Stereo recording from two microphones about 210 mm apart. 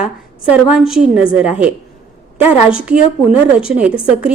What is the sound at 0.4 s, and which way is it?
A woman's voice, 5° right (ahead or behind).